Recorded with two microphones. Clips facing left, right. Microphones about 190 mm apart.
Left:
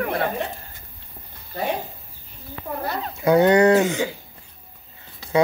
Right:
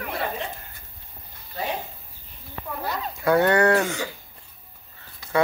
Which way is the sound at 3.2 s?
20° left (ahead or behind).